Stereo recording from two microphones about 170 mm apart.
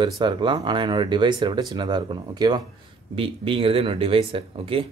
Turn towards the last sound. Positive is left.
turn(degrees=-30)  # may be behind; listen again after turning